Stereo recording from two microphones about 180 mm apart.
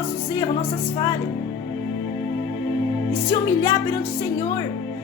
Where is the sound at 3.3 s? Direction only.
15° left (ahead or behind).